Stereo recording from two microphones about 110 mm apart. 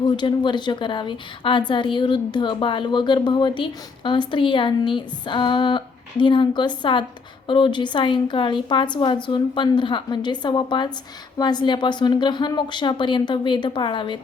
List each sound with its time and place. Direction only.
0.2 s a woman's voice: 45° left (ahead or behind)